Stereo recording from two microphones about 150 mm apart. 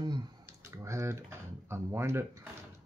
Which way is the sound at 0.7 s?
20° right (ahead or behind).